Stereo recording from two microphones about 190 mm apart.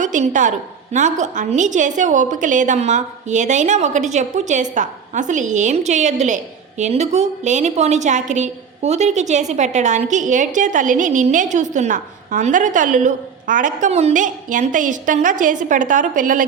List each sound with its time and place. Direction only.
0.0 s a woman's voice: 40° right (ahead or behind)